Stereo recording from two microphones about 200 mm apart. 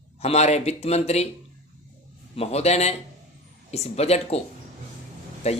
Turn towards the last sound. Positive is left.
turn(degrees=30)  # may be behind; listen again after turning